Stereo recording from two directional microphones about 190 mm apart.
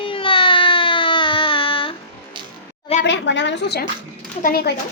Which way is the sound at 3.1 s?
70° left (ahead or behind).